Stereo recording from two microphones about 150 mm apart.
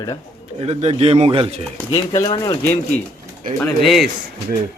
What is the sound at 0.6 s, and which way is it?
Speech, 40° right (ahead or behind).